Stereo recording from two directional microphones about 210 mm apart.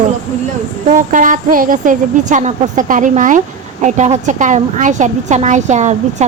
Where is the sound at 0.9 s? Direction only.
40° right (ahead or behind).